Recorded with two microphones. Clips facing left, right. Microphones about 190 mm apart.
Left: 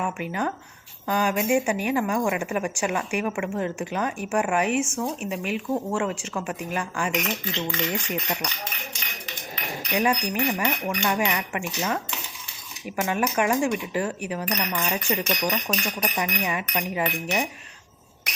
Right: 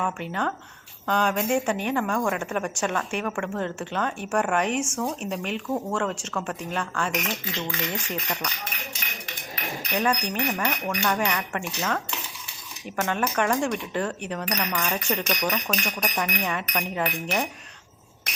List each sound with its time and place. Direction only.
0.0 s a woman's voice: 10° left (ahead or behind)
7.7 s a woman's voice: 15° left (ahead or behind)
9.9 s a woman's voice: 10° left (ahead or behind)
13.0 s a woman's voice: 10° left (ahead or behind)